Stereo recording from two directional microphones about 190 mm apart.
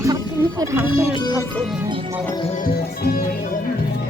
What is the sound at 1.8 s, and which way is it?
Music, 20° right (ahead or behind).